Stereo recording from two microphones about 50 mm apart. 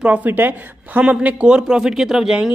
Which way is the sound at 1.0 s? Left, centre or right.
Centre.